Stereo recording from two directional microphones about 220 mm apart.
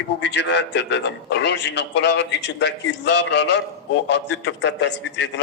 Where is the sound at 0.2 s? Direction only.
50° left (ahead or behind).